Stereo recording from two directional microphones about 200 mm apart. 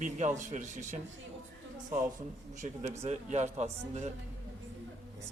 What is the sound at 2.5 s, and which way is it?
A man's voice, 35° right (ahead or behind).